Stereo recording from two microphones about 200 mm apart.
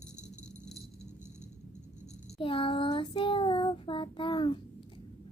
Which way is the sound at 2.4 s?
25° left (ahead or behind).